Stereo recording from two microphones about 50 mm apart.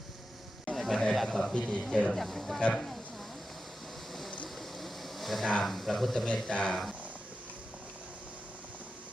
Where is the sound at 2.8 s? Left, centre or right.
Centre.